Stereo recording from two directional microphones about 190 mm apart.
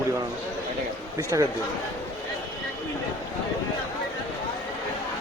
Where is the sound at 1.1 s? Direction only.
15° right (ahead or behind).